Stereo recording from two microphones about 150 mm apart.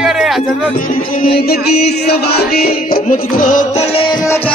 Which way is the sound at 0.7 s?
70° left (ahead or behind).